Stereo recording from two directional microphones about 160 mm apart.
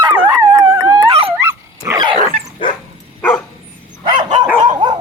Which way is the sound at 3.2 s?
10° left (ahead or behind).